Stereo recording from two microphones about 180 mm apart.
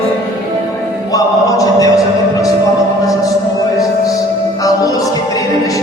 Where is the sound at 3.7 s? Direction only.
20° left (ahead or behind).